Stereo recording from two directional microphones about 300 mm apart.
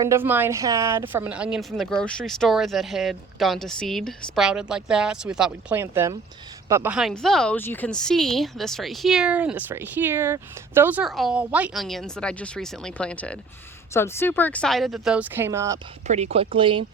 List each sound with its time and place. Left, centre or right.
0.0 s speech: centre
16.0 s speech: right